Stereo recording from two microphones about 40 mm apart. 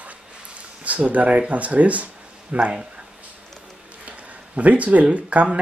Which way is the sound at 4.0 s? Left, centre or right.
Right.